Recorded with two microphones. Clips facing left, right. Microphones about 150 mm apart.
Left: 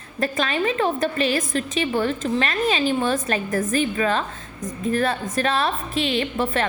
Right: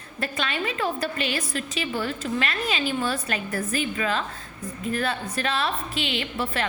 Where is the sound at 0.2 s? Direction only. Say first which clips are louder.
Left 6 dB; 40° left (ahead or behind).